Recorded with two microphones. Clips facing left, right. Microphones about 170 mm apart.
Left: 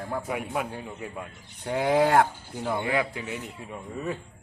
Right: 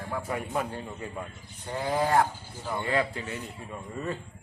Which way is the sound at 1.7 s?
80° left.